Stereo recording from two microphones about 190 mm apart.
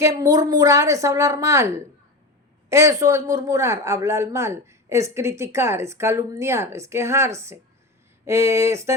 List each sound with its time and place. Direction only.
0.0 s speech: 20° right (ahead or behind)